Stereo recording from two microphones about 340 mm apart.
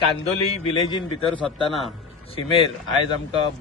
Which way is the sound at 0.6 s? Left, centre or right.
Centre.